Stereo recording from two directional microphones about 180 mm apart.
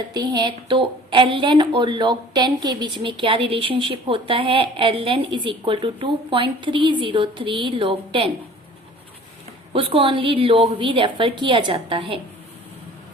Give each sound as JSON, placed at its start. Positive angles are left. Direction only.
{"t": 0.1, "sound": "a woman's voice", "side_deg": -25}
{"t": 9.7, "sound": "a woman's voice", "side_deg": -30}